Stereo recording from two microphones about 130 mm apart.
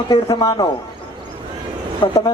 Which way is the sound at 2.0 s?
40° left (ahead or behind).